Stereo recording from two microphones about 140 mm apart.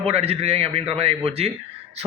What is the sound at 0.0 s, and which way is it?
A man's voice, 50° right (ahead or behind).